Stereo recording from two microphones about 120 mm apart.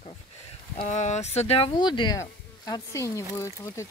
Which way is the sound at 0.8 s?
80° left.